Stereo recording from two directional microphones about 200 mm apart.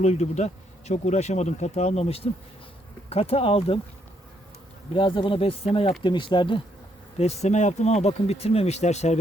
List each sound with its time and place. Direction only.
0.0 s speech: 35° left (ahead or behind)
4.9 s speech: 25° left (ahead or behind)